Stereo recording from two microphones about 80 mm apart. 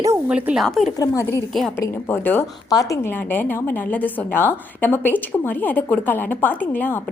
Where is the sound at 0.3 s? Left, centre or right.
Centre.